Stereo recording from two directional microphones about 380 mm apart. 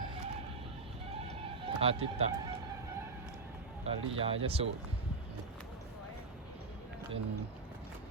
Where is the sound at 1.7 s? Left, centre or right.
Centre.